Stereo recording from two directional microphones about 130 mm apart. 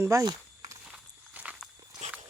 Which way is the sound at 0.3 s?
25° right (ahead or behind).